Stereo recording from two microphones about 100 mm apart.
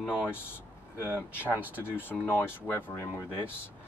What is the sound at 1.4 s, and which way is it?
Speech, 15° right (ahead or behind).